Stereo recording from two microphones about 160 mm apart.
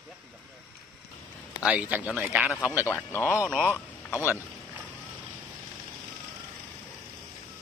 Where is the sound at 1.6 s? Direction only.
10° right (ahead or behind).